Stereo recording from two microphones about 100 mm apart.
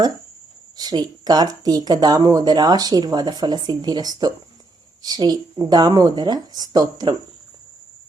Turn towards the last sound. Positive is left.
turn(degrees=-40)  # may be behind; listen again after turning